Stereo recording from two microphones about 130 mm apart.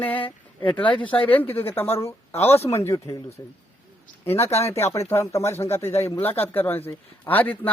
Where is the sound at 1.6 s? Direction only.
20° left (ahead or behind).